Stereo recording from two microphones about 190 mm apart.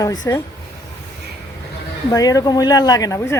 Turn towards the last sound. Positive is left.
turn(degrees=15)  # may be behind; listen again after turning